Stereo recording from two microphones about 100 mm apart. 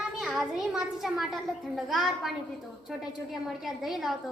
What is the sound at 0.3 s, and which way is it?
A woman's voice, 5° right (ahead or behind).